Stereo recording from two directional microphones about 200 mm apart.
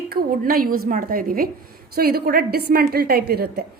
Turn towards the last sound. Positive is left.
turn(degrees=-55)  # may be behind; listen again after turning